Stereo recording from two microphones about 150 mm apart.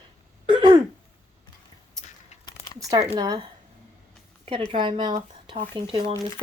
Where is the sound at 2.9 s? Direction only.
25° right (ahead or behind).